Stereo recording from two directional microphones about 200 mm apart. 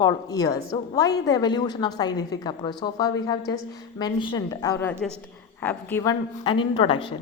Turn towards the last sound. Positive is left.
turn(degrees=25)  # may be behind; listen again after turning